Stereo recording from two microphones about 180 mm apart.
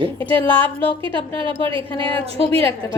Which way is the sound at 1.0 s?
30° right (ahead or behind).